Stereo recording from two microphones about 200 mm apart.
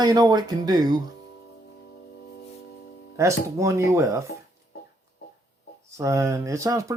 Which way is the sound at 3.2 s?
15° right (ahead or behind).